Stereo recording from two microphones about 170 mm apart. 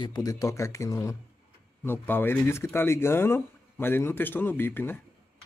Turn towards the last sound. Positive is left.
turn(degrees=10)  # may be behind; listen again after turning